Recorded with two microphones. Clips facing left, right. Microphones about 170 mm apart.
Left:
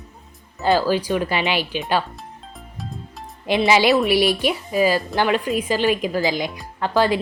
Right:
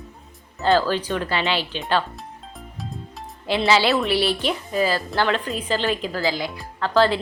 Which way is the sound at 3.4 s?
15° left (ahead or behind).